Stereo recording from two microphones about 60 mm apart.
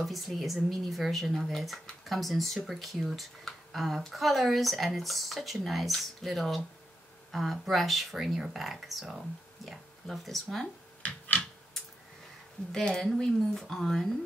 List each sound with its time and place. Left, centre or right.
0.0 s speech: centre
11.0 s a sound: left
12.7 s speech: centre